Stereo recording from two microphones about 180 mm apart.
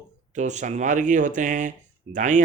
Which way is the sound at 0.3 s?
40° right (ahead or behind).